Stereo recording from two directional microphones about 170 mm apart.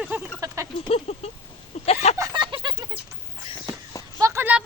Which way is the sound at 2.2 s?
25° right (ahead or behind).